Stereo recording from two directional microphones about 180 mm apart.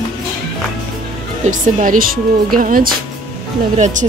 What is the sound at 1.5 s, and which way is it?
Speech, 45° right (ahead or behind).